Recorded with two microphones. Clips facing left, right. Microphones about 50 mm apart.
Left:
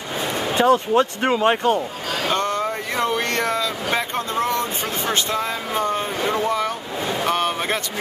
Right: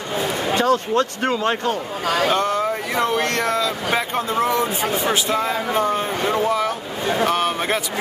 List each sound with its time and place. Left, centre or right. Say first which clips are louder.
0.6 s speech: left 3 dB; centre
2.2 s speech: even; centre